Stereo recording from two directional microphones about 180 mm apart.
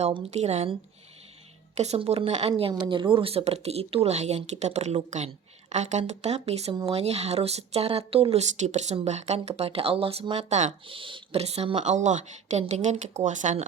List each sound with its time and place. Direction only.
0.0 s speech: 40° right (ahead or behind)
10.8 s speech: 30° right (ahead or behind)